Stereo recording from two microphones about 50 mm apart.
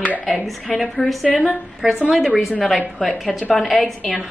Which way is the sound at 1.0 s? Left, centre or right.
Centre.